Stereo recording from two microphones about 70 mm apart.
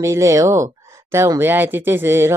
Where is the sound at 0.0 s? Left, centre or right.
Right.